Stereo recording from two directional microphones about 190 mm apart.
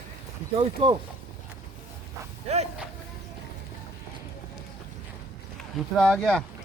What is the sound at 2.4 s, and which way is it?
Speech, 35° right (ahead or behind).